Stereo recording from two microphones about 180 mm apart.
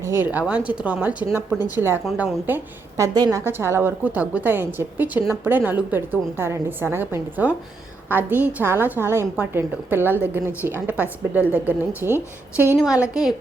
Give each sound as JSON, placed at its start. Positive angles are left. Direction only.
{"t": 0.0, "sound": "a woman's voice", "side_deg": -10}